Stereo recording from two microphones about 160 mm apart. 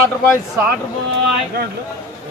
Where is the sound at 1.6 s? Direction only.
75° right (ahead or behind).